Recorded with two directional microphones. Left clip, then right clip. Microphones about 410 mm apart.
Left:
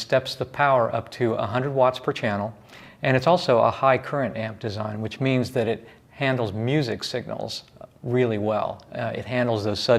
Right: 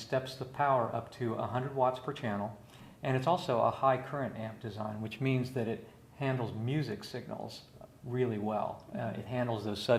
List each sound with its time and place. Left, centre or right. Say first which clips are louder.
0.1 s speech: left 12 dB; left
5.0 s speech: left 11 dB; left